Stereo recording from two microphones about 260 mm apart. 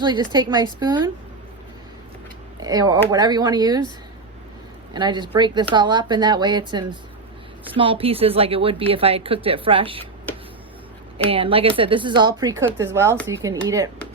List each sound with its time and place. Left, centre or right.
0.0 s speech: centre
2.6 s speech: centre
4.9 s a woman's voice: centre
11.3 s speech: right